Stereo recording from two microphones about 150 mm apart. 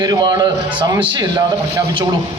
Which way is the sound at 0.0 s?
30° right (ahead or behind).